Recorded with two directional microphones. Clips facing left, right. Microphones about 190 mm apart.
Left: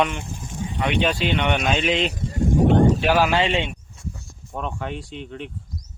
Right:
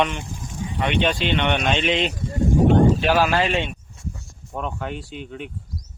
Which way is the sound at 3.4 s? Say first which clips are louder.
Even; 25° left (ahead or behind).